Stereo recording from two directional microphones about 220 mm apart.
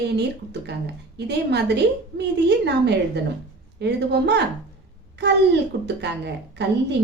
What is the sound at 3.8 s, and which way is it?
A woman's voice, 50° right (ahead or behind).